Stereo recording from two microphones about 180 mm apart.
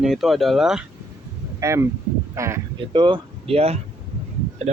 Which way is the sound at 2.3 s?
15° right (ahead or behind).